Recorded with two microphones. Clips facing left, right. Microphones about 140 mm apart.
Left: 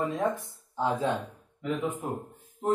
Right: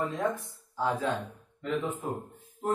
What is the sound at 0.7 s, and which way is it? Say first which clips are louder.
Speech: left 2 dB; 20° left (ahead or behind).